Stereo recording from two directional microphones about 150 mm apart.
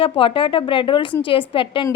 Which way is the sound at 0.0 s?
35° left (ahead or behind).